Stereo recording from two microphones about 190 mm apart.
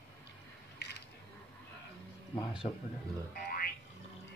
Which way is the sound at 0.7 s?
60° left (ahead or behind).